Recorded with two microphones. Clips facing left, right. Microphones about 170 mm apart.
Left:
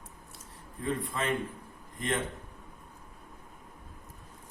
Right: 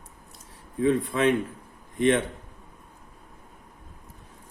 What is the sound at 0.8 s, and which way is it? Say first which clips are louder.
A man's voice: right 10 dB; 75° right (ahead or behind).